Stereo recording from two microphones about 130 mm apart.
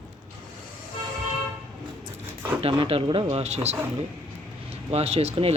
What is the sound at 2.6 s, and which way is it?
Speech, 45° right (ahead or behind).